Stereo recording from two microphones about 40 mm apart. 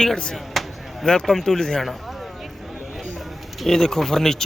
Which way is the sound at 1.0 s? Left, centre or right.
Centre.